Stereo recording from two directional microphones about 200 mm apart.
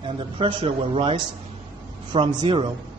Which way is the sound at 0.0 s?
25° right (ahead or behind).